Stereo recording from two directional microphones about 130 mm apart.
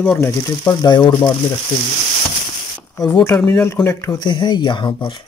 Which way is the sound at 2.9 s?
25° left (ahead or behind).